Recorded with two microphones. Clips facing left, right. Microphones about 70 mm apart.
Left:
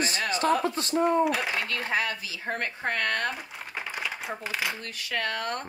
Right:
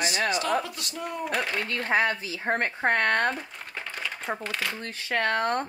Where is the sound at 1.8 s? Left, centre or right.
Right.